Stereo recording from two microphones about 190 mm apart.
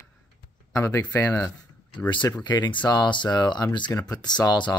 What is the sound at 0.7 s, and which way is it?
Speech, 15° left (ahead or behind).